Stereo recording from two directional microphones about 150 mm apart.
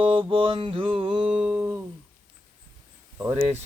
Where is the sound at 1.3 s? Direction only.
10° right (ahead or behind).